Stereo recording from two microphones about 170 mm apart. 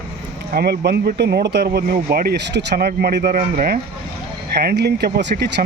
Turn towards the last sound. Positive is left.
turn(degrees=-75)  # may be behind; listen again after turning